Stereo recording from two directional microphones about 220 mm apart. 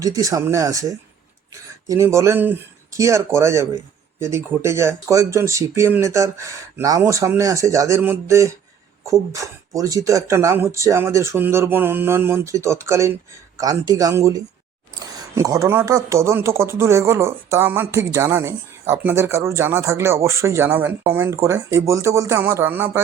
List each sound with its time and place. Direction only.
0.0 s speech: 15° right (ahead or behind)